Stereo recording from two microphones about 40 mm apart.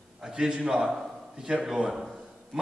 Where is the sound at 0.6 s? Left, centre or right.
Centre.